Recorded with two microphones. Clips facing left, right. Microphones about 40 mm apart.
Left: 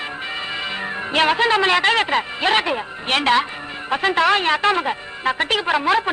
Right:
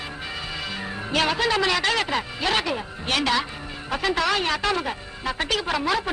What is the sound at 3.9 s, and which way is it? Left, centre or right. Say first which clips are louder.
Speech: left 6 dB; left.